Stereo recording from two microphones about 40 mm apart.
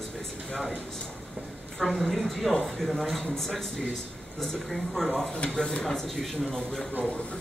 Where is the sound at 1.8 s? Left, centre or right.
Centre.